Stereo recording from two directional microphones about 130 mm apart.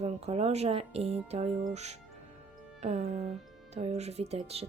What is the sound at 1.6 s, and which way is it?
Music, 60° right (ahead or behind).